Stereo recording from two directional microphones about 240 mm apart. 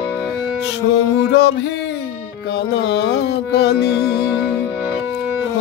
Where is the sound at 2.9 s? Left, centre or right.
Left.